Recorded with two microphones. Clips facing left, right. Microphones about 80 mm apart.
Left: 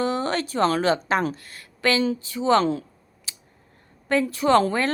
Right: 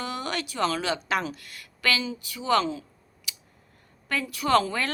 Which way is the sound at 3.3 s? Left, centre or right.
Left.